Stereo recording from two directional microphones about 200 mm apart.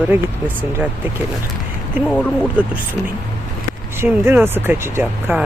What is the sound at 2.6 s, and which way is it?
Speech, 5° right (ahead or behind).